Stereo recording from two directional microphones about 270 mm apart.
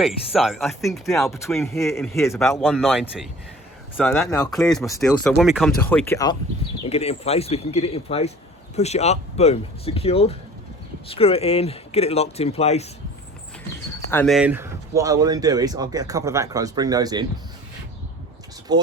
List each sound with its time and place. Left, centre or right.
0.0 s speech: centre
2.6 s speech: centre
6.8 s speech: left
14.1 s speech: centre
18.7 s speech: centre